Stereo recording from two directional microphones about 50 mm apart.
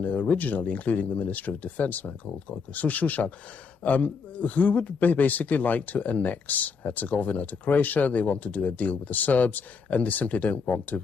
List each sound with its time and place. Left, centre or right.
0.0 s a man's voice: left